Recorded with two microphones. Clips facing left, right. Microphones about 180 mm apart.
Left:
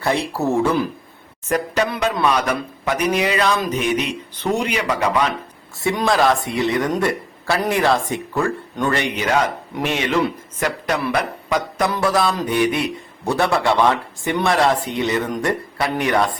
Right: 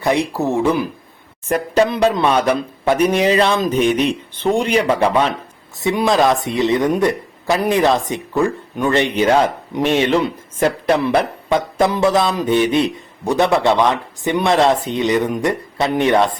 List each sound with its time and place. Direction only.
0.0 s speech: 15° right (ahead or behind)
1.5 s a man's voice: 30° right (ahead or behind)
5.8 s a man's voice: 15° right (ahead or behind)
9.0 s a man's voice: 30° right (ahead or behind)